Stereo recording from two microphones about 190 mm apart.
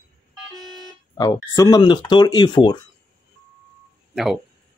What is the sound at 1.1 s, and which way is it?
Speech, 20° left (ahead or behind).